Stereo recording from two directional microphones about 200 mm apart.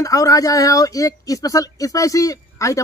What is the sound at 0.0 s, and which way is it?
Speech, 15° left (ahead or behind).